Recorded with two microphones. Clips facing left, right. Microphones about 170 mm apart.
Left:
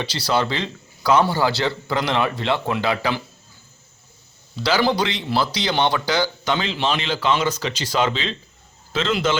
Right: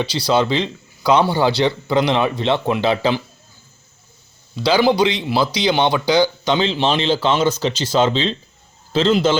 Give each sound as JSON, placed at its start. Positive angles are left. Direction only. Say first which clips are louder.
{"t": 0.0, "sound": "a man's voice", "louder": "right 4 dB", "side_deg": -15}
{"t": 4.5, "sound": "a man's voice", "louder": "right 4 dB", "side_deg": -15}